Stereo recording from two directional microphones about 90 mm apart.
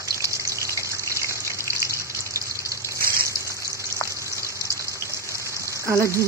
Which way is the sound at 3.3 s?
35° right (ahead or behind).